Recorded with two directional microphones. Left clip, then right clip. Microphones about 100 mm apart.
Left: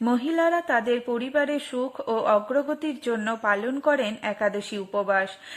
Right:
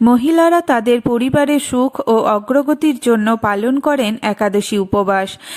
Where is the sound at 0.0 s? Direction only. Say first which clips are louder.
Right 11 dB; 70° right (ahead or behind).